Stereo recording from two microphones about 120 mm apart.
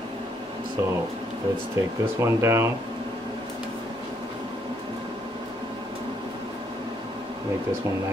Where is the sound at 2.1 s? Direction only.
20° right (ahead or behind).